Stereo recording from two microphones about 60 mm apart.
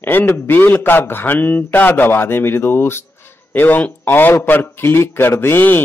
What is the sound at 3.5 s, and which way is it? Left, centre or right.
A man's voice, left.